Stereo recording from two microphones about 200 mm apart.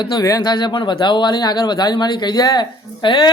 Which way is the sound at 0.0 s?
20° left (ahead or behind).